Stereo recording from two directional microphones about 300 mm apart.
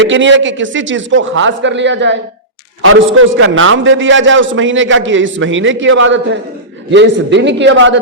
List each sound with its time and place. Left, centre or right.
0.1 s a man's voice: right